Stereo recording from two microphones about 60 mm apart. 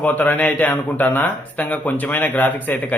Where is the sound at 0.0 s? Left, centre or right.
Left.